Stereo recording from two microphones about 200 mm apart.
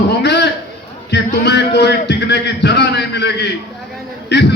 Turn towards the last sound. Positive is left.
turn(degrees=60)  # may be behind; listen again after turning